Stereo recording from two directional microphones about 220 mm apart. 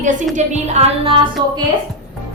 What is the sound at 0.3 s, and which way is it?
Speech, 30° right (ahead or behind).